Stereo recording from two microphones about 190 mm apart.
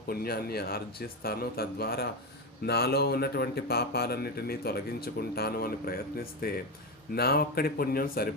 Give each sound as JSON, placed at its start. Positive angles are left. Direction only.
{"t": 0.1, "sound": "speech", "side_deg": 55}